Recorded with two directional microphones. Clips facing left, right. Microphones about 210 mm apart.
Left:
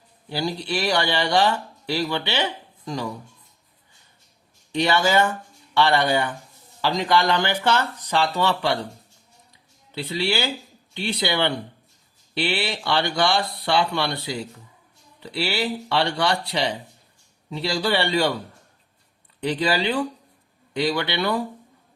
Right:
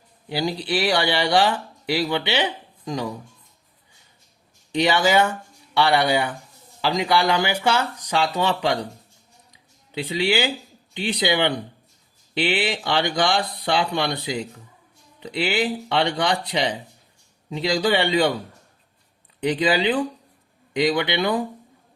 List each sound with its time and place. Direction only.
0.3 s speech: 15° right (ahead or behind)
4.7 s speech: 15° right (ahead or behind)
9.5 s music: 15° right (ahead or behind)
10.9 s speech: 15° right (ahead or behind)
19.4 s speech: 15° right (ahead or behind)